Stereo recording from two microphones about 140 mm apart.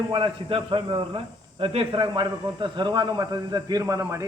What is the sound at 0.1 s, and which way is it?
A man's voice, 40° right (ahead or behind).